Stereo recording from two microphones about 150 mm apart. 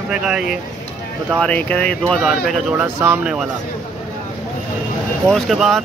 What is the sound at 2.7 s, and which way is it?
Speech, 10° right (ahead or behind).